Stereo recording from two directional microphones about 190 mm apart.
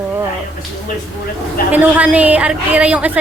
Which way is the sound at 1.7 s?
10° right (ahead or behind).